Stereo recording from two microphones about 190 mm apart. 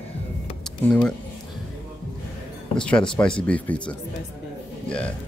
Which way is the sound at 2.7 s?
5° left (ahead or behind).